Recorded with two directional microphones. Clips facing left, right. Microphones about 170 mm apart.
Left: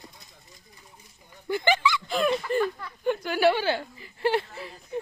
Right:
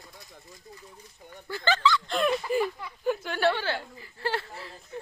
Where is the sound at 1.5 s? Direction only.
15° left (ahead or behind).